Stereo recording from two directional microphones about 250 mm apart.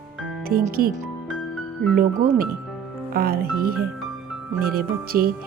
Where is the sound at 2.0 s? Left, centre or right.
Right.